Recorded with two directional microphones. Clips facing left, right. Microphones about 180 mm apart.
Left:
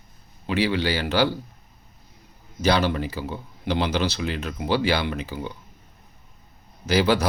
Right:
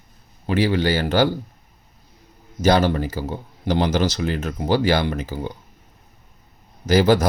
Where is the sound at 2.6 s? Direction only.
45° right (ahead or behind).